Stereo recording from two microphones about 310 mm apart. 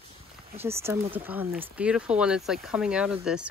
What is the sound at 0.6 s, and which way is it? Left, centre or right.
Speech, centre.